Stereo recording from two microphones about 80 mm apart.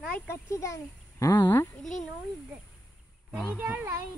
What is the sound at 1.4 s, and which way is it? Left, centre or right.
Speech, left.